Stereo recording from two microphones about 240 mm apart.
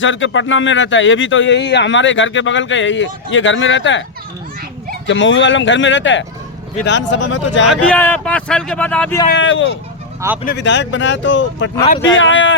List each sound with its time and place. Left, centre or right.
0.0 s a man's voice: left
5.0 s a man's voice: left
7.7 s speech: centre
9.3 s a man's voice: left
10.2 s speech: centre
10.4 s a man's voice: left